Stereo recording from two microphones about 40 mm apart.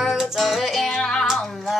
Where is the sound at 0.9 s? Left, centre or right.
Centre.